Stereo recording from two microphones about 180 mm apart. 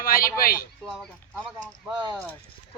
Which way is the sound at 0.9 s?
Centre (ahead or behind).